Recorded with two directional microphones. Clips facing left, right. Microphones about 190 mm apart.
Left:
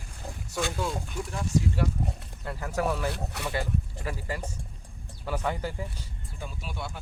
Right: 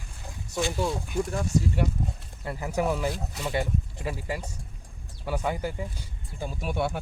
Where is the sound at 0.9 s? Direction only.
45° right (ahead or behind).